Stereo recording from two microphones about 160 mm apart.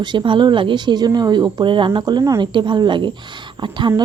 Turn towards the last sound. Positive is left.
turn(degrees=-30)  # may be behind; listen again after turning